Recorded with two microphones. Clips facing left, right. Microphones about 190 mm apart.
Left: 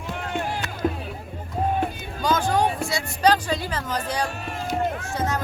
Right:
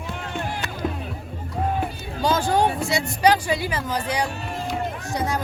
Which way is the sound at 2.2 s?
30° right (ahead or behind).